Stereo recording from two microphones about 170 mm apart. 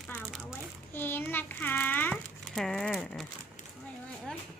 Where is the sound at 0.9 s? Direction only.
10° left (ahead or behind).